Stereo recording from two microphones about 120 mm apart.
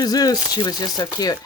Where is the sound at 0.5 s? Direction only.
30° left (ahead or behind).